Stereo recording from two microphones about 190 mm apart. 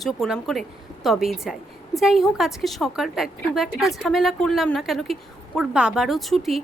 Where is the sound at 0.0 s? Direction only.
Centre (ahead or behind).